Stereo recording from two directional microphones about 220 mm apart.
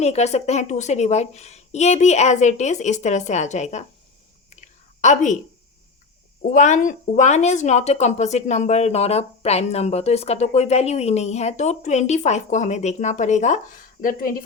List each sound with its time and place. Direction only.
0.0 s speech: 30° left (ahead or behind)
4.4 s a sound: 30° left (ahead or behind)
6.5 s speech: 35° left (ahead or behind)